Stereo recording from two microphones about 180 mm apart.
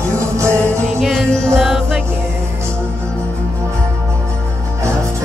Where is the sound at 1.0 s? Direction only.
Centre (ahead or behind).